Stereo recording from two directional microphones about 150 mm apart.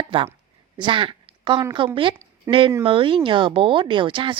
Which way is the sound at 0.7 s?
35° right (ahead or behind).